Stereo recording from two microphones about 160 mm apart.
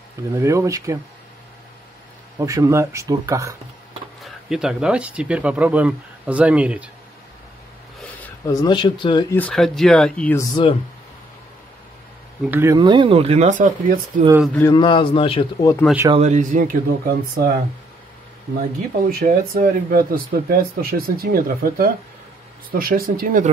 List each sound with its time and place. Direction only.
0.3 s speech: 20° right (ahead or behind)
2.3 s speech: 20° right (ahead or behind)
4.2 s speech: centre (ahead or behind)
8.5 s speech: 25° left (ahead or behind)
9.5 s speech: centre (ahead or behind)
10.3 s speech: 20° left (ahead or behind)
12.4 s speech: 15° right (ahead or behind)
12.7 s speech: 30° right (ahead or behind); by 14.2 s 55° right (ahead or behind)
14.7 s a man's voice: 30° left (ahead or behind)
15.8 s speech: 10° left (ahead or behind)
16.2 s speech: 50° right (ahead or behind); by 17.6 s 65° right (ahead or behind)
18.6 s speech: 65° right (ahead or behind)